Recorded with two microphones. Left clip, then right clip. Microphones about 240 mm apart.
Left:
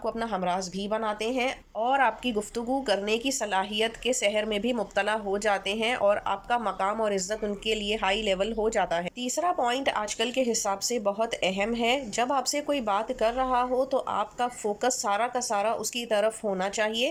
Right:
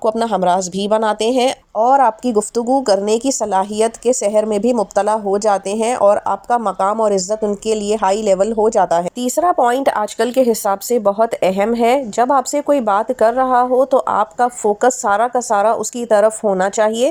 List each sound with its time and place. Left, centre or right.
0.0 s speech: right
1.8 s speech: right